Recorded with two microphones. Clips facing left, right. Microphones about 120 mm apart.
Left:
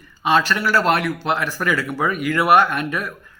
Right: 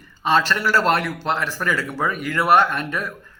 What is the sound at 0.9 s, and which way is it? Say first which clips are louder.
Speech: left 1 dB; 35° right (ahead or behind).